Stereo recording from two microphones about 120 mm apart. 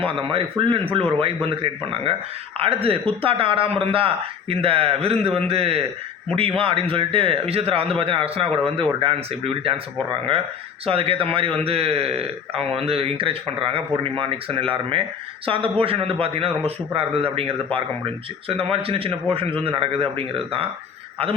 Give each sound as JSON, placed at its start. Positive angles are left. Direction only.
{"t": 0.0, "sound": "a man's voice", "side_deg": -45}